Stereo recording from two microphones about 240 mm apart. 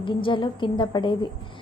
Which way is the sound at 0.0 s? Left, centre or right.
Left.